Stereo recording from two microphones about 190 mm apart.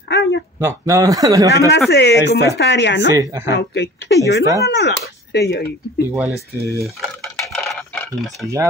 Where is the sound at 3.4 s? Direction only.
65° left (ahead or behind).